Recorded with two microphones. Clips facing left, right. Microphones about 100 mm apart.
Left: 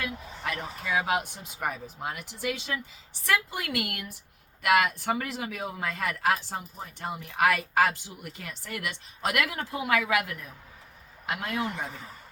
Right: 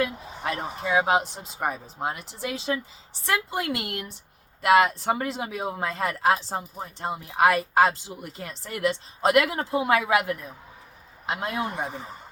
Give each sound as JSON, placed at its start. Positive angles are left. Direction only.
{"t": 0.0, "sound": "speech", "side_deg": -25}